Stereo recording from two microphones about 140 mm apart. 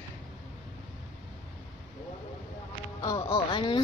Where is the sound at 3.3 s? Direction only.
40° left (ahead or behind).